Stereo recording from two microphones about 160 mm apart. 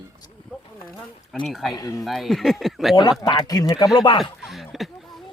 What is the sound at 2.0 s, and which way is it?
Speech, centre (ahead or behind).